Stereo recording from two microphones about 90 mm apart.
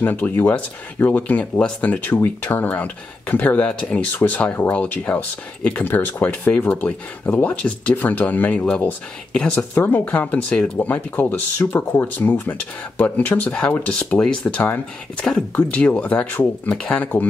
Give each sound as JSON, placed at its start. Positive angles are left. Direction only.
{"t": 0.0, "sound": "speech", "side_deg": 20}
{"t": 11.5, "sound": "speech", "side_deg": 30}